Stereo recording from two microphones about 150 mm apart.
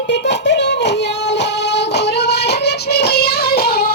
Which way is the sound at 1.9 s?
90° left.